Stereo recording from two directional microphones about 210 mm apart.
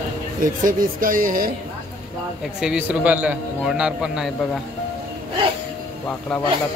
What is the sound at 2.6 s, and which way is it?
A man's voice, 5° right (ahead or behind).